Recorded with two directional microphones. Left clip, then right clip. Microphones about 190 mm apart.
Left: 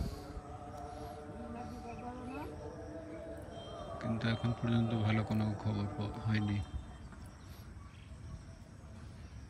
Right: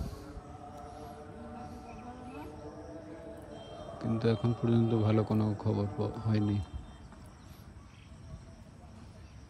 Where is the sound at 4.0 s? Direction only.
25° right (ahead or behind).